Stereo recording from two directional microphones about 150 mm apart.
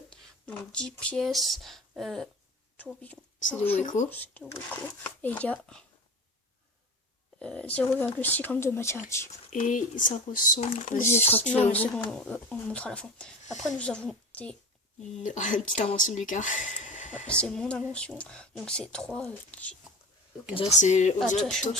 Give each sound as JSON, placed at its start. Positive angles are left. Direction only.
{"t": 0.1, "sound": "a woman's voice", "side_deg": 5}
{"t": 3.8, "sound": "speech", "side_deg": 55}
{"t": 4.1, "sound": "speech", "side_deg": 10}
{"t": 7.3, "sound": "speech", "side_deg": 10}
{"t": 9.5, "sound": "speech", "side_deg": 60}
{"t": 11.3, "sound": "speech", "side_deg": 10}
{"t": 15.2, "sound": "speech", "side_deg": 55}
{"t": 17.2, "sound": "speech", "side_deg": 5}
{"t": 20.5, "sound": "speech", "side_deg": 35}
{"t": 20.7, "sound": "speech", "side_deg": 55}